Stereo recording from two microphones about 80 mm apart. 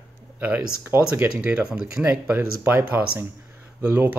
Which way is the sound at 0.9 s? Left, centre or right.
Right.